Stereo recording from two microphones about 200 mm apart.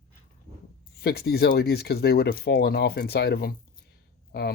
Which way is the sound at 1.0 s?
55° left (ahead or behind).